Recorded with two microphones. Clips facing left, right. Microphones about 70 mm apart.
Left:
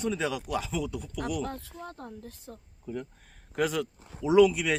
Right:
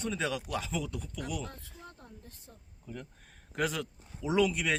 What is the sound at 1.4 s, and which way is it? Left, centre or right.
Speech, left.